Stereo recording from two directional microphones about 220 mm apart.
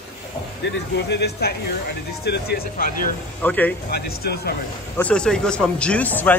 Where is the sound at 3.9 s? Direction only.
45° left (ahead or behind).